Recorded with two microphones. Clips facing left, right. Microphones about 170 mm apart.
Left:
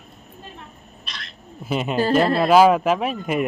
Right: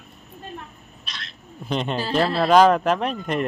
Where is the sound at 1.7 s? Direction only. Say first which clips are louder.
Left 4 dB; 5° left (ahead or behind).